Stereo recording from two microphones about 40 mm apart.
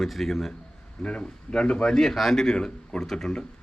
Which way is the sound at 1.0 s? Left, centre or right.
Left.